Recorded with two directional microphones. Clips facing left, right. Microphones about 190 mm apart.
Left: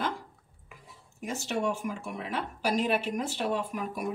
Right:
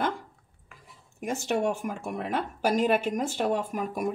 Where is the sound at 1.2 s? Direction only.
55° right (ahead or behind).